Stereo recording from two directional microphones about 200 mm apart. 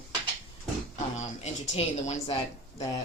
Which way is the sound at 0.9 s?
35° left (ahead or behind).